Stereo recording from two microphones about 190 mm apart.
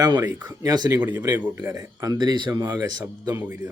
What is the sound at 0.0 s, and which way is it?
Speech, 20° right (ahead or behind).